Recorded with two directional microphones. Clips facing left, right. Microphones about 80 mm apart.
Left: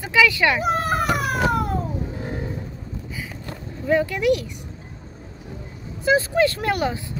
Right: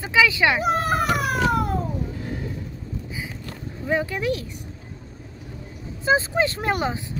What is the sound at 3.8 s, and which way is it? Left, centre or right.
Speech, right.